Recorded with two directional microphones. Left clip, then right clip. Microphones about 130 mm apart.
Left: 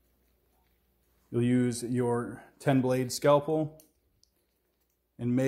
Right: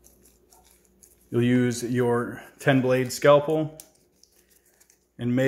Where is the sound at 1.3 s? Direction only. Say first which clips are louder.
Right 5 dB; 10° left (ahead or behind).